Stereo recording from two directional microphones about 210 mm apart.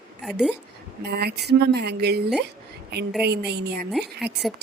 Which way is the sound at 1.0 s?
50° right (ahead or behind).